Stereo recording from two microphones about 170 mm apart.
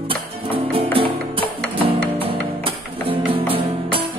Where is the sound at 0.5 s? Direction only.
30° right (ahead or behind).